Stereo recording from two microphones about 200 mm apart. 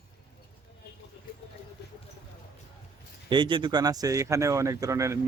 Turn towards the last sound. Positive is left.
turn(degrees=-15)  # may be behind; listen again after turning